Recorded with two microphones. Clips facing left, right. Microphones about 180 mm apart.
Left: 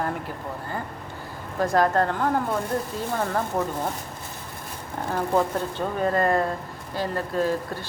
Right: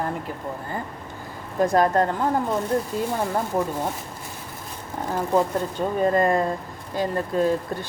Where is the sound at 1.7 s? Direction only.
20° right (ahead or behind).